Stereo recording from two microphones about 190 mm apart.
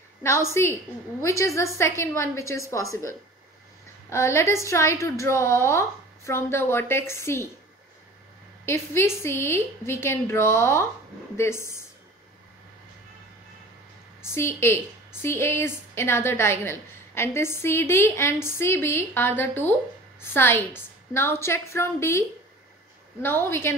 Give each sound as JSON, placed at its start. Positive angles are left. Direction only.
{"t": 0.5, "sound": "a woman's voice", "side_deg": 15}
{"t": 8.6, "sound": "a woman's voice", "side_deg": 15}
{"t": 14.2, "sound": "a woman's voice", "side_deg": 15}
{"t": 23.2, "sound": "a woman's voice", "side_deg": 10}